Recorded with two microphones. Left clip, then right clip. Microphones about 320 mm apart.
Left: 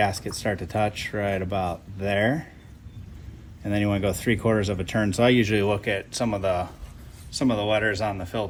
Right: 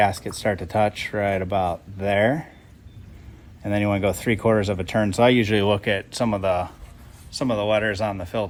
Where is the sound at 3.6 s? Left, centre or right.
Right.